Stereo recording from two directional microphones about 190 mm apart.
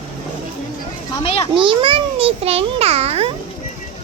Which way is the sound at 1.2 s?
30° left (ahead or behind).